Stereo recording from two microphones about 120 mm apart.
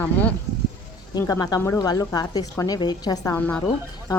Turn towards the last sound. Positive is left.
turn(degrees=15)  # may be behind; listen again after turning